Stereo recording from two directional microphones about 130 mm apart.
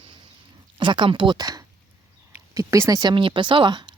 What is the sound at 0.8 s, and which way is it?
A woman's voice, 40° right (ahead or behind).